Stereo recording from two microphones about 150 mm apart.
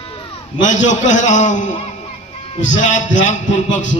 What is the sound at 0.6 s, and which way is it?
A man's voice, 55° left (ahead or behind).